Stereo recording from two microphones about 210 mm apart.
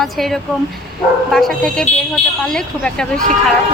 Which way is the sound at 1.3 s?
Centre (ahead or behind).